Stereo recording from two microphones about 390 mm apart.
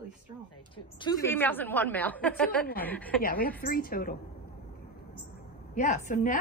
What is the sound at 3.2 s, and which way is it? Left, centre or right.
Speech, left.